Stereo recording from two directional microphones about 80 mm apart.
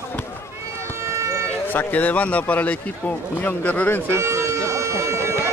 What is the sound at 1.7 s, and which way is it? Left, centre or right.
A man's voice, left.